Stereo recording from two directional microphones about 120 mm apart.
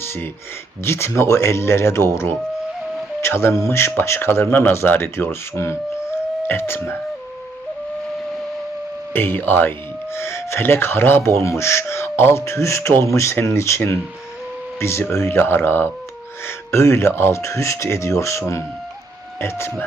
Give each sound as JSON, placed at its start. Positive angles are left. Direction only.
{"t": 0.0, "sound": "a sound", "side_deg": 20}
{"t": 0.9, "sound": "speech", "side_deg": 20}
{"t": 3.2, "sound": "music", "side_deg": 20}
{"t": 3.6, "sound": "speech", "side_deg": 20}
{"t": 9.1, "sound": "speech", "side_deg": 15}